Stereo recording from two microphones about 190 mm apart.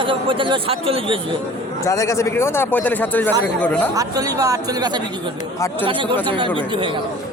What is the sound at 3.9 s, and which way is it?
Speech, 20° right (ahead or behind).